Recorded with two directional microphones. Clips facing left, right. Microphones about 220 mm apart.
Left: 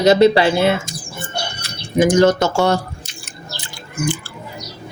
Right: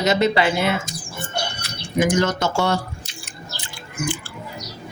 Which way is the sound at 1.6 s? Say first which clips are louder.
Left 6 dB; 30° left (ahead or behind).